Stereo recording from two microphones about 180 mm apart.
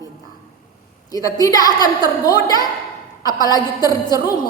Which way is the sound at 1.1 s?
20° left (ahead or behind).